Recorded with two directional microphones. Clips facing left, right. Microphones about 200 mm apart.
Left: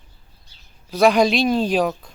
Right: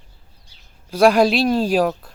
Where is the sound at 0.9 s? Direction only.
10° right (ahead or behind).